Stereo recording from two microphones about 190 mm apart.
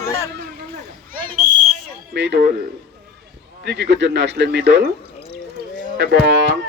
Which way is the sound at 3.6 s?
65° right (ahead or behind).